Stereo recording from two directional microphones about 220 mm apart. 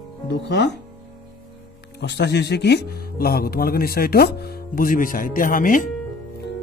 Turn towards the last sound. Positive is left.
turn(degrees=40)  # may be behind; listen again after turning